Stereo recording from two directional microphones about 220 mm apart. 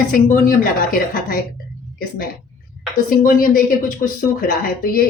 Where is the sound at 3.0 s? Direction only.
40° left (ahead or behind).